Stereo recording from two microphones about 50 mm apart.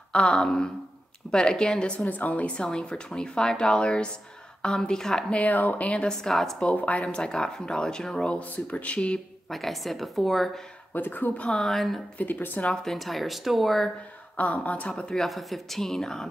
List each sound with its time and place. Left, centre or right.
0.1 s speech: centre
2.0 s speech: left; by 5.2 s centre
5.3 s speech: left
6.0 s speech: centre
6.6 s speech: left
8.3 s speech: left
9.5 s a woman's voice: centre
10.9 s speech: left
11.5 s a woman's voice: centre
12.2 s speech: left
12.8 s a woman's voice: centre
14.3 s speech: left
15.1 s a woman's voice: centre